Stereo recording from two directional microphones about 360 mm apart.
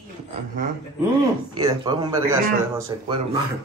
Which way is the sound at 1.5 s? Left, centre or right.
Centre.